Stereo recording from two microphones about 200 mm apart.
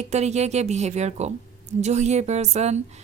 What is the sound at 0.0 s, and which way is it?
A woman's voice, 35° right (ahead or behind).